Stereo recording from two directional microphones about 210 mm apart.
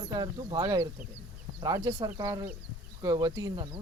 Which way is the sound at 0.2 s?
20° right (ahead or behind).